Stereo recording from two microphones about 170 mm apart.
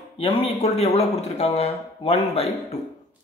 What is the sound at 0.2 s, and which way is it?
Speech, 30° left (ahead or behind).